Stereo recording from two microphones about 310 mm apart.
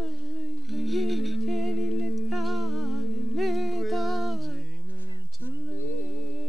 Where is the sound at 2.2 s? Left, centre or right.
Centre.